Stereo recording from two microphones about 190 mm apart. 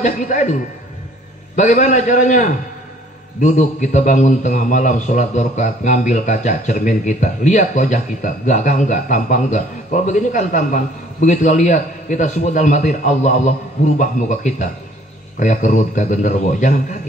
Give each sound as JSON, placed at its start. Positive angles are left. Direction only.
{"t": 0.0, "sound": "a man's voice", "side_deg": 40}
{"t": 1.6, "sound": "a man's voice", "side_deg": 40}